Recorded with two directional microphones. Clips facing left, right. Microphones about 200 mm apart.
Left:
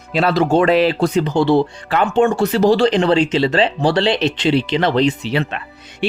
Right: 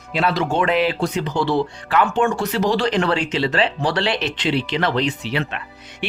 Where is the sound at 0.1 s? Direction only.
35° left (ahead or behind).